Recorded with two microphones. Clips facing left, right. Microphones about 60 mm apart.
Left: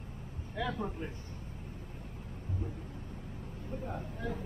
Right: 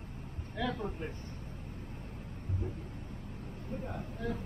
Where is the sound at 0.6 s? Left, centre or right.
Left.